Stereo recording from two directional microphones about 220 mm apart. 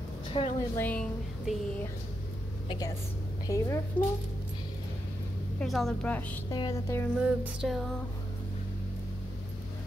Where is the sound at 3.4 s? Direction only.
15° left (ahead or behind).